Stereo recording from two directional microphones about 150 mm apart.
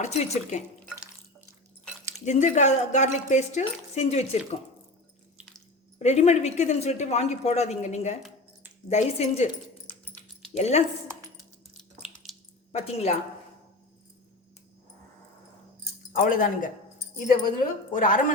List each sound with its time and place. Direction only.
0.0 s speech: 50° left (ahead or behind)
2.2 s speech: 50° left (ahead or behind)
6.0 s speech: 50° left (ahead or behind)
10.5 s speech: 45° left (ahead or behind)
11.8 s a sound: centre (ahead or behind)
12.7 s speech: 45° left (ahead or behind)
16.1 s a woman's voice: 65° left (ahead or behind)